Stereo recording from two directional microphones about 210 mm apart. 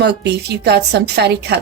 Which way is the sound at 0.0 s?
50° right (ahead or behind).